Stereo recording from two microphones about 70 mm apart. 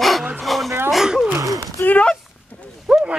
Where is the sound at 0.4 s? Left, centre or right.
Centre.